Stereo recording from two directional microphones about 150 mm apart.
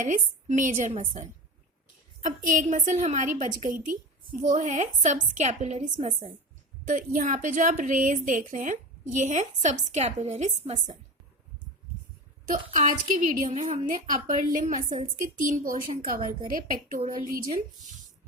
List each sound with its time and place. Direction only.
0.0 s a woman's voice: 60° right (ahead or behind)
6.8 s a woman's voice: 65° right (ahead or behind); by 10.9 s 50° right (ahead or behind)
12.7 s a woman's voice: 60° right (ahead or behind)